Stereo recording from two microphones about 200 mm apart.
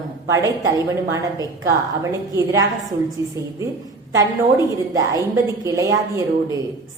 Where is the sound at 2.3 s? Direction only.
15° right (ahead or behind).